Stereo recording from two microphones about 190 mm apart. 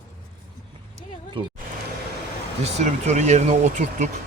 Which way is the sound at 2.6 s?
35° right (ahead or behind).